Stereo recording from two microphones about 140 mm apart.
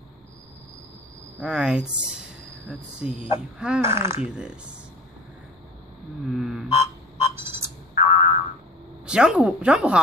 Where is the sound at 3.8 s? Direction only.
20° right (ahead or behind).